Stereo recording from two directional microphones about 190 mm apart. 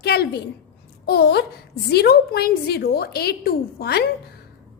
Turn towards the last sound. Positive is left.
turn(degrees=55)  # may be behind; listen again after turning